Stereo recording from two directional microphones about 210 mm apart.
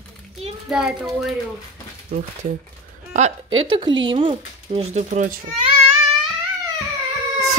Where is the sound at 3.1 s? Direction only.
35° right (ahead or behind).